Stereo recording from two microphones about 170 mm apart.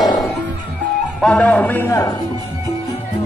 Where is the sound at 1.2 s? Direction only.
5° left (ahead or behind).